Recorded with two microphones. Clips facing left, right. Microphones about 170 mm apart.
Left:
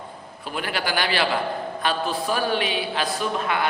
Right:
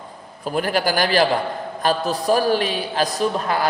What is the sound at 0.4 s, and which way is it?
A man's voice, 40° right (ahead or behind).